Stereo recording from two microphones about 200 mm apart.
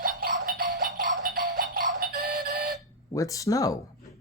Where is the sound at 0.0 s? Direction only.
45° right (ahead or behind).